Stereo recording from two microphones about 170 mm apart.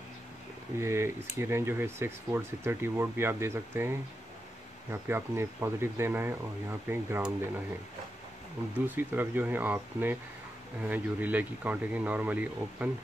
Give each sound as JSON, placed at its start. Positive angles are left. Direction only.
{"t": 0.7, "sound": "speech", "side_deg": -15}
{"t": 5.0, "sound": "speech", "side_deg": -15}
{"t": 8.8, "sound": "speech", "side_deg": -10}